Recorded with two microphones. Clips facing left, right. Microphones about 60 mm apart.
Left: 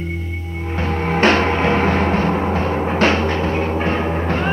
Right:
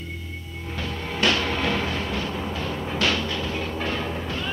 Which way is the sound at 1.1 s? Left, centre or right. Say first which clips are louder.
Left 8 dB; left.